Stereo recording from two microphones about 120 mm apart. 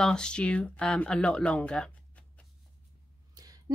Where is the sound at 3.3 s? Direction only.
30° right (ahead or behind).